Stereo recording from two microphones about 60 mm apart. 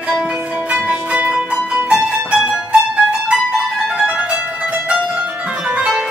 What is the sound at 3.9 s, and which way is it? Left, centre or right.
Music, centre.